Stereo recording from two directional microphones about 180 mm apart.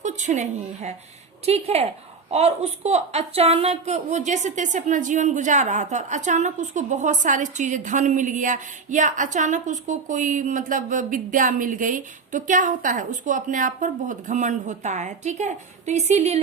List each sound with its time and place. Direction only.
0.0 s a woman's voice: 40° right (ahead or behind)